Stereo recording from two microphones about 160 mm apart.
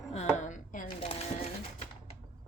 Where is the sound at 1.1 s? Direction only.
40° left (ahead or behind).